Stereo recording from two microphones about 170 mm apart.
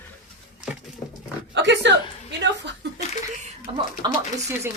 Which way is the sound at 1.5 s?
90° right.